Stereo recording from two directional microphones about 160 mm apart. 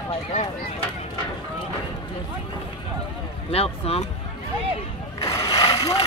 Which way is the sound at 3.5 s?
40° left (ahead or behind).